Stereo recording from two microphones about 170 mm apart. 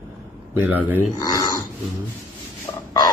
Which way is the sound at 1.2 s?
20° left (ahead or behind).